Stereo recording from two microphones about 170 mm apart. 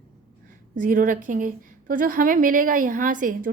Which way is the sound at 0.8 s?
55° right (ahead or behind).